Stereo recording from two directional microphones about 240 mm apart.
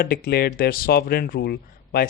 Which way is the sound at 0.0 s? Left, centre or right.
Left.